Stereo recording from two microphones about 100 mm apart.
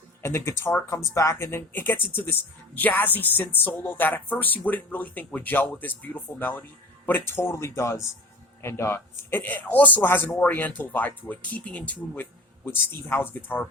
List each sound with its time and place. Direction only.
0.2 s speech: 25° left (ahead or behind)